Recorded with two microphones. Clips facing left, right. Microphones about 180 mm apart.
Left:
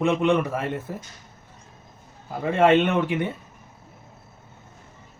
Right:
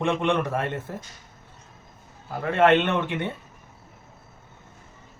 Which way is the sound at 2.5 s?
10° left (ahead or behind).